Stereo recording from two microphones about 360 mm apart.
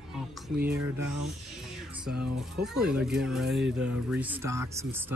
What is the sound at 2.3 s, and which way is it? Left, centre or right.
Speech, centre.